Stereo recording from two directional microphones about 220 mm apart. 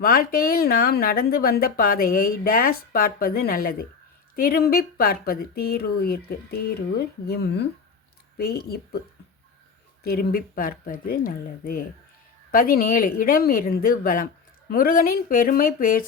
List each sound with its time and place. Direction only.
0.0 s speech: 40° left (ahead or behind)
10.0 s speech: 45° left (ahead or behind)